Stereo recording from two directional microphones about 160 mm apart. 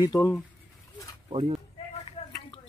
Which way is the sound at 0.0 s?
25° left (ahead or behind).